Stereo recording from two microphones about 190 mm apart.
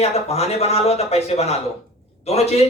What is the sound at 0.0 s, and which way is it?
A man's voice, 35° left (ahead or behind).